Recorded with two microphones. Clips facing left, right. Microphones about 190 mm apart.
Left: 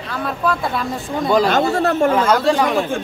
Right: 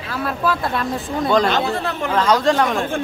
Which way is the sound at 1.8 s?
45° left (ahead or behind).